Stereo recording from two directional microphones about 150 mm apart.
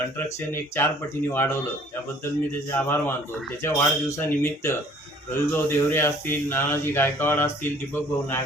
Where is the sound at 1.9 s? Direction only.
15° left (ahead or behind).